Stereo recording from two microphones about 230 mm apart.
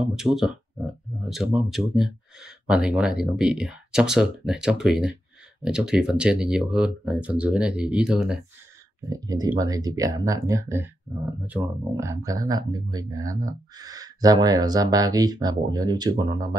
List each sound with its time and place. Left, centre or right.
0.0 s speech: centre
9.1 s speech: centre